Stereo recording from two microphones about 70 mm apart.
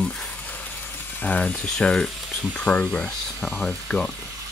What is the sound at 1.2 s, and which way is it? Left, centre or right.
Speech, left.